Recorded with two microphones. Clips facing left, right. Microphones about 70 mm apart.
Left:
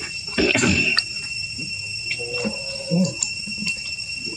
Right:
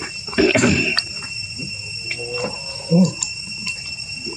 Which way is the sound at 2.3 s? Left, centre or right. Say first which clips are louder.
Right 1 dB; right.